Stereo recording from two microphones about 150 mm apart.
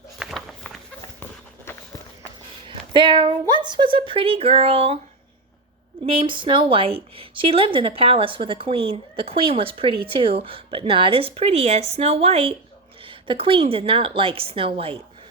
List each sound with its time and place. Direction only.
0.2 s a sound: centre (ahead or behind)
1.2 s walk: 15° left (ahead or behind)
2.6 s a woman's voice: 35° right (ahead or behind)
6.1 s a woman's voice: 35° right (ahead or behind)